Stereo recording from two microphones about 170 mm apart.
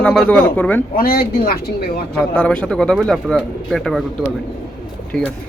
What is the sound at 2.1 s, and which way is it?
Speech, 5° left (ahead or behind).